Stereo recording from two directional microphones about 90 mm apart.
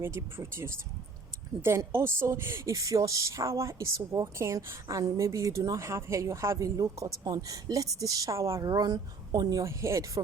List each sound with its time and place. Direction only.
0.0 s speech: 25° right (ahead or behind)
8.6 s speech: 45° right (ahead or behind)